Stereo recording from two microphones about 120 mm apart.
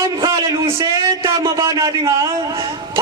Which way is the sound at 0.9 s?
30° right (ahead or behind).